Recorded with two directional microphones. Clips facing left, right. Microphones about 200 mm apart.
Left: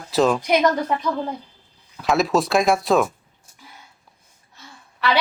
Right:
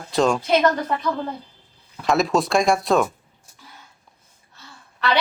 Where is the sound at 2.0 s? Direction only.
Centre (ahead or behind).